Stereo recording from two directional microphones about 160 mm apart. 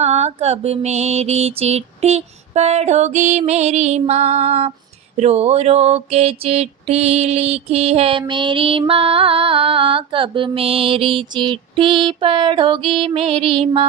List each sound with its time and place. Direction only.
0.0 s mantra: 40° right (ahead or behind)
5.1 s music: 40° right (ahead or behind)